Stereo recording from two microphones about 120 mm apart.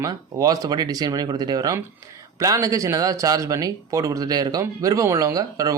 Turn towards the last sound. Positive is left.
turn(degrees=-30)  # may be behind; listen again after turning